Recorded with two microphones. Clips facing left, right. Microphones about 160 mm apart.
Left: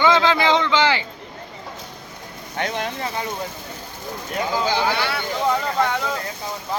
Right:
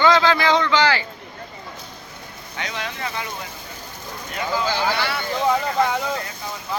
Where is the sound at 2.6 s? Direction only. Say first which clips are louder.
Left 5 dB; 50° left (ahead or behind).